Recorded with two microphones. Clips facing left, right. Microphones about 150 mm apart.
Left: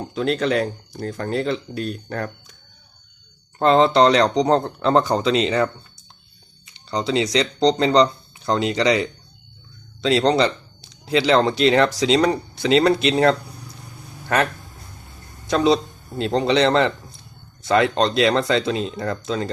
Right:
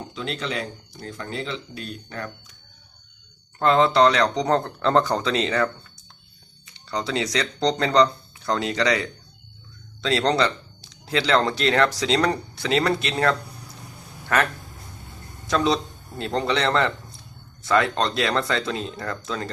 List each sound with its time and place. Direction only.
0.1 s speech: 50° left (ahead or behind)
3.6 s speech: 30° left (ahead or behind)
6.8 s speech: 20° left (ahead or behind)
15.4 s a man's voice: 20° left (ahead or behind)